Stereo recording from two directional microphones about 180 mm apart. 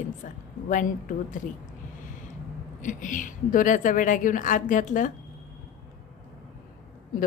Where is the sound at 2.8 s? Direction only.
45° left (ahead or behind).